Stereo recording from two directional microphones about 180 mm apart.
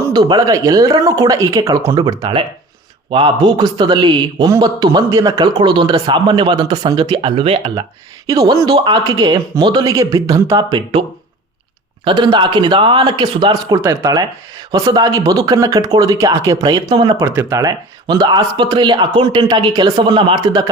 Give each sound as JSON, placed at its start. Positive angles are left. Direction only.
{"t": 0.0, "sound": "a man's voice", "side_deg": -25}
{"t": 8.3, "sound": "a man's voice", "side_deg": -20}
{"t": 12.0, "sound": "a man's voice", "side_deg": -25}